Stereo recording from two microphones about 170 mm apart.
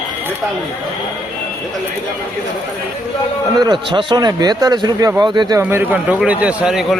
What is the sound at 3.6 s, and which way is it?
A man's voice, 25° right (ahead or behind).